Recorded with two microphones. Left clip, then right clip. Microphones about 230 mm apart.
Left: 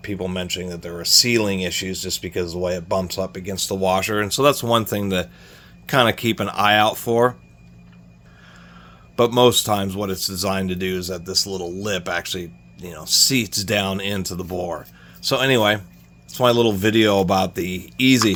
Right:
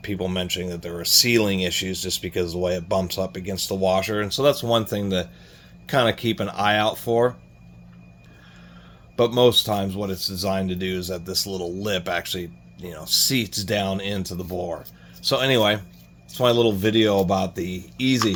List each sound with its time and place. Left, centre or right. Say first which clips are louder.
0.0 s a man's voice: even; centre; by 7.3 s left
9.1 s a man's voice: left 2 dB; left